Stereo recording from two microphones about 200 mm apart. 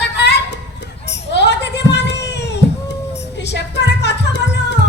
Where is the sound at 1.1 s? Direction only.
60° left (ahead or behind).